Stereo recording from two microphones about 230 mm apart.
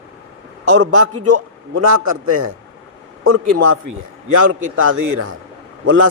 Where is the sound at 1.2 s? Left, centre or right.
Right.